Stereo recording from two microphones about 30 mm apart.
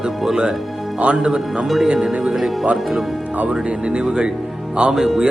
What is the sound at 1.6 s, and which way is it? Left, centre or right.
Speech, centre.